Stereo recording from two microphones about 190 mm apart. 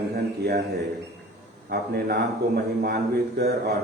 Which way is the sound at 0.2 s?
55° right (ahead or behind).